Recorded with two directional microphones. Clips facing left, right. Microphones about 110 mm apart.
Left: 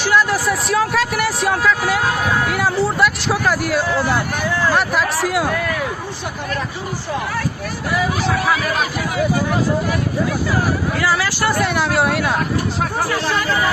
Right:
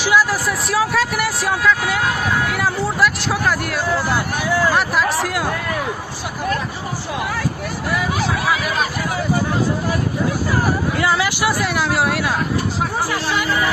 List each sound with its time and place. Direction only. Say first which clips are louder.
0.0 s speech: even; 5° right (ahead or behind)
8.4 s speech: left 1 dB; centre (ahead or behind)
10.9 s speech: right 1 dB; 25° right (ahead or behind)
11.4 s speech: left 4 dB; centre (ahead or behind)